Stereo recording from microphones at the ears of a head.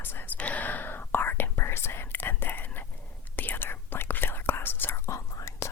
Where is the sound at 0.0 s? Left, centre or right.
Left.